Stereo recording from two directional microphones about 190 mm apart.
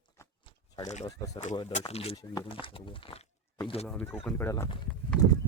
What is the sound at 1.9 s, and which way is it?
Speech, 30° left (ahead or behind).